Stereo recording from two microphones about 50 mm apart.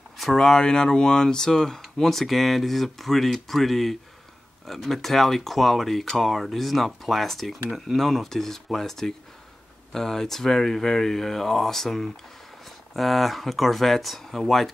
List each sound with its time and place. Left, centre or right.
0.2 s speech: centre